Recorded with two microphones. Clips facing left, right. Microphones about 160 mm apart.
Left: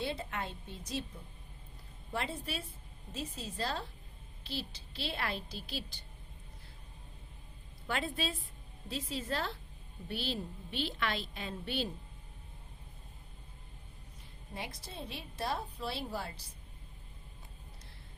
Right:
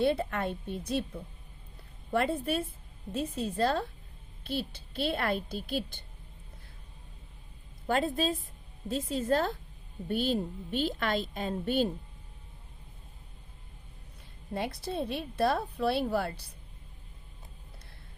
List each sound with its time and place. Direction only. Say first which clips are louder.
0.0 s a woman's voice: right 10 dB; 55° right (ahead or behind)
7.9 s a woman's voice: right 8 dB; 40° right (ahead or behind)
14.5 s a woman's voice: right 11 dB; 65° right (ahead or behind)